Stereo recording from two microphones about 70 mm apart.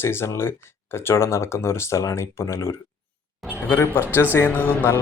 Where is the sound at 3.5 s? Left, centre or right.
Left.